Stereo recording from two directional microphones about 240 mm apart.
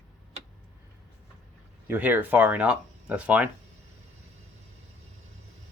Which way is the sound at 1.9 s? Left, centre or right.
Centre.